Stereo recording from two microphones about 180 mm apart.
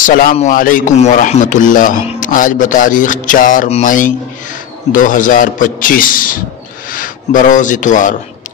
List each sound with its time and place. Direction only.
0.0 s speech: 50° left (ahead or behind)